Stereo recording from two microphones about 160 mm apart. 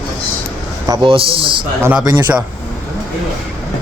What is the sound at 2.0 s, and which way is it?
Speech, 10° right (ahead or behind).